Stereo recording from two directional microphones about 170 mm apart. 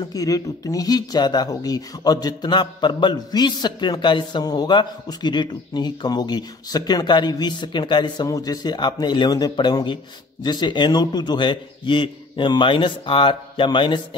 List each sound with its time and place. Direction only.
0.1 s speech: 20° left (ahead or behind)